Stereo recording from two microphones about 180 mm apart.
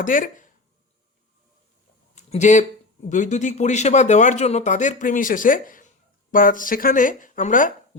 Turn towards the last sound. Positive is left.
turn(degrees=45)  # may be behind; listen again after turning